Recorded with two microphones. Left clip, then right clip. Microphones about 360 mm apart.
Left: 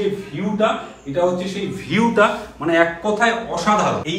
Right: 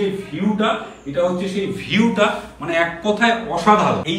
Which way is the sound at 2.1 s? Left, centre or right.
Left.